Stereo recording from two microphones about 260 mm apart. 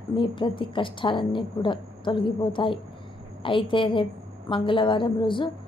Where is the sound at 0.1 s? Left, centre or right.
Centre.